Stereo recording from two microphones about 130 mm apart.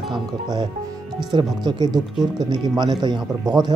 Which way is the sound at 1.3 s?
35° right (ahead or behind).